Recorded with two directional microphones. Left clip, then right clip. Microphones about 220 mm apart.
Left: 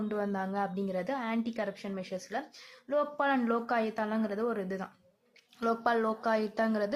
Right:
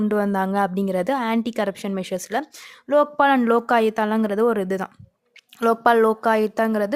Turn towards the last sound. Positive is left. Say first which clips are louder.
# right 10 dB
turn(degrees=-40)  # may be behind; listen again after turning